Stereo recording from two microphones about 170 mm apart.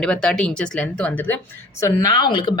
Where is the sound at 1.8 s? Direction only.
20° left (ahead or behind).